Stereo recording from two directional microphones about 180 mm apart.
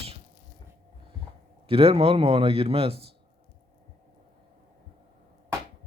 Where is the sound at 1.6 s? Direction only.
30° right (ahead or behind).